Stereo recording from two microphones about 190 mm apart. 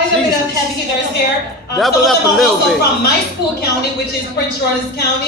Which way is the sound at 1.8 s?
Centre (ahead or behind).